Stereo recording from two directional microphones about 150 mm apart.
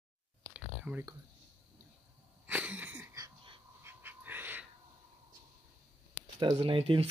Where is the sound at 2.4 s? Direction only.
10° right (ahead or behind).